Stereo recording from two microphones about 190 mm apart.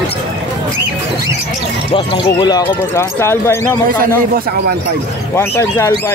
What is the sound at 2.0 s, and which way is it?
Speech, 25° left (ahead or behind).